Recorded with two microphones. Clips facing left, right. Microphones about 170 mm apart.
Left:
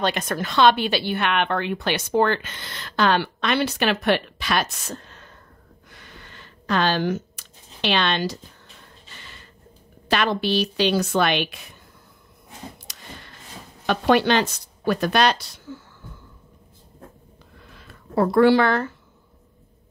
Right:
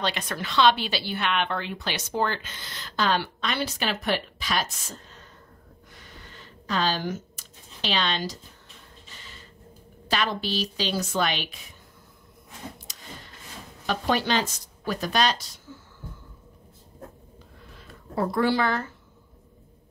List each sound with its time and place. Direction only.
0.0 s a woman's voice: 45° left (ahead or behind); by 5.2 s 65° left (ahead or behind)
5.9 s a sound: 70° left (ahead or behind)
10.0 s a woman's voice: 65° left (ahead or behind)
12.9 s a sound: 65° left (ahead or behind)
13.8 s speech: 65° left (ahead or behind)
18.1 s a woman's voice: 70° left (ahead or behind)